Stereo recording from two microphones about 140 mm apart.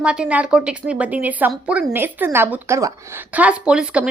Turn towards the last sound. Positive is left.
turn(degrees=-5)  # may be behind; listen again after turning